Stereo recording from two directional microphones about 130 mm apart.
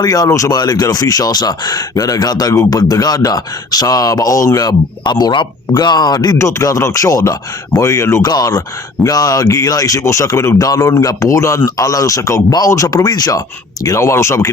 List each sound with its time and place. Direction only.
0.0 s speech: 30° left (ahead or behind)